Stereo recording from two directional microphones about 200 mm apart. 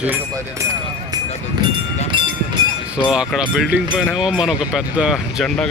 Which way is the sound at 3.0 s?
5° right (ahead or behind).